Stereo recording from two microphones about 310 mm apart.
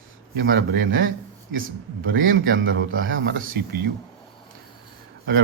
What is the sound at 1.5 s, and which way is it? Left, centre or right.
Speech, right.